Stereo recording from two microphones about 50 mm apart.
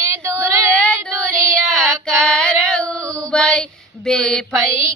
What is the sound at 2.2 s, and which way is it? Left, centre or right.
Female singing, centre.